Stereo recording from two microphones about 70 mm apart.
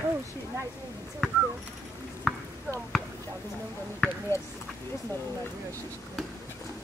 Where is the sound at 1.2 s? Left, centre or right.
Centre.